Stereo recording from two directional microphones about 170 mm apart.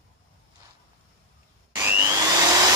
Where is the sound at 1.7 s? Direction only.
15° right (ahead or behind).